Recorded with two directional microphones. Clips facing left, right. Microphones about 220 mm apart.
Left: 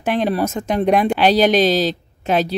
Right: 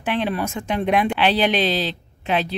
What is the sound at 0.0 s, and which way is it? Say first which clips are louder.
Speech: left 4 dB; 40° left (ahead or behind).